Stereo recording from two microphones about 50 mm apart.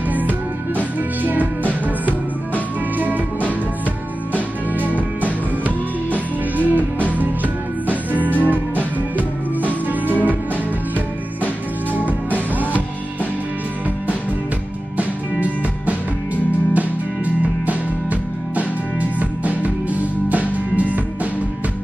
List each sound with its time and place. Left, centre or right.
1.2 s music: right
4.7 s music: right
10.0 s music: right
11.9 s music: right
16.7 s music: right